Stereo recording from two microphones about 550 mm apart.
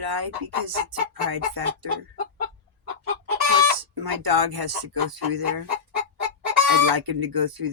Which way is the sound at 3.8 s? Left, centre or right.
Right.